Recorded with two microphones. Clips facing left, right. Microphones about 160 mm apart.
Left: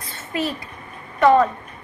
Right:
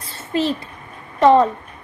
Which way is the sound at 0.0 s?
30° right (ahead or behind).